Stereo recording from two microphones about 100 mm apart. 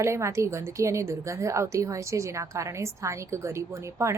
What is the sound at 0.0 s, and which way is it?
A woman's voice, 30° right (ahead or behind).